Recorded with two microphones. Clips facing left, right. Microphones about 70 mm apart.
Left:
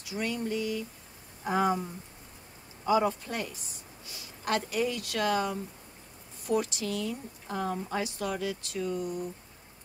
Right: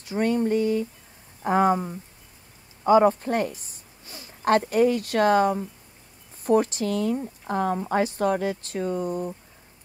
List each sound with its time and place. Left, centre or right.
0.0 s a woman's voice: right